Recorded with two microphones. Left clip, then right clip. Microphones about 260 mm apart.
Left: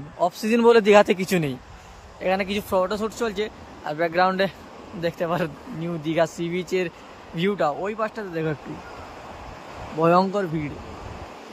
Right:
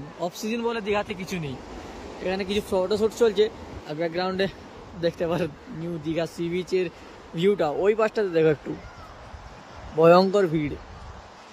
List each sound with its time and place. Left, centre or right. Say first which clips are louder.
0.2 s speech: left 9 dB; centre
9.9 s speech: right 3 dB; centre